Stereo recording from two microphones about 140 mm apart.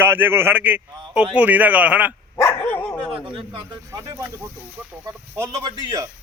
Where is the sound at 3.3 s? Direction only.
35° right (ahead or behind).